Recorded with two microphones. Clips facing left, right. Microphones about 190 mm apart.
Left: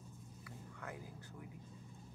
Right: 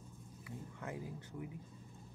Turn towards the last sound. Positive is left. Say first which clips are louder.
# right 6 dB
turn(degrees=-25)  # may be behind; listen again after turning